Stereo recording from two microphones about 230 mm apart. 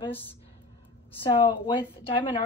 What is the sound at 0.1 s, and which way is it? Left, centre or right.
Speech, centre.